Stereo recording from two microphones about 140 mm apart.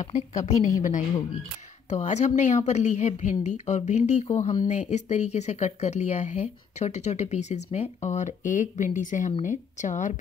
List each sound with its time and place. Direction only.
0.0 s speech: 60° left (ahead or behind)
1.9 s speech: 55° left (ahead or behind)